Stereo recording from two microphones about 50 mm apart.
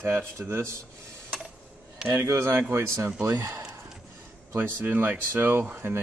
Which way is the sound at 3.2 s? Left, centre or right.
Right.